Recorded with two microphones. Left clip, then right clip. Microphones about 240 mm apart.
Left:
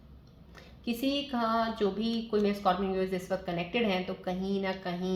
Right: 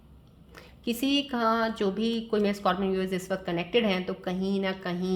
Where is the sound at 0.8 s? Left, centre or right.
Right.